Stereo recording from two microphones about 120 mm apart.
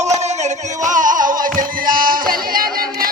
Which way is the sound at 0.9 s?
90° right.